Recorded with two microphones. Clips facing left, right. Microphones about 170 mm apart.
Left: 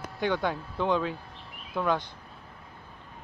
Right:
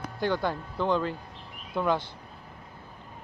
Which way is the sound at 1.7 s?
10° right (ahead or behind).